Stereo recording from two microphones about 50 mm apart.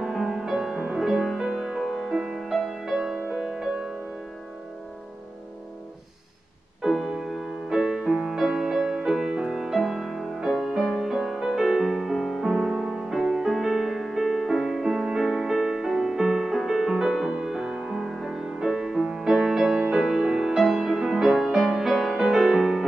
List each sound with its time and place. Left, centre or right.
0.0 s music: centre
1.5 s music: centre
1.8 s music: centre
6.8 s music: centre
17.8 s music: centre